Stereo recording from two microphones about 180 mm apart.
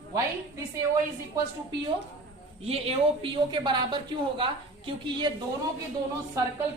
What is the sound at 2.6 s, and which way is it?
A woman's voice, 35° right (ahead or behind).